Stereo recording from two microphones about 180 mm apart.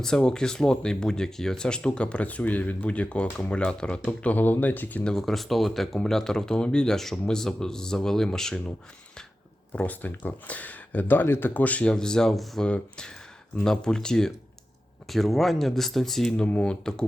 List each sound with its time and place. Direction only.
0.0 s speech: 5° left (ahead or behind)
9.7 s speech: 10° left (ahead or behind)